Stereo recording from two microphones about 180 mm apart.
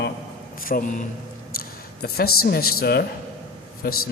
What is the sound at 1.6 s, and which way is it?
Speech, 55° left (ahead or behind).